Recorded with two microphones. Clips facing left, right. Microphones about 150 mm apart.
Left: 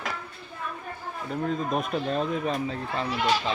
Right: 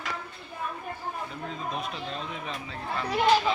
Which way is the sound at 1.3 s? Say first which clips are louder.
Left 7 dB; 50° left (ahead or behind).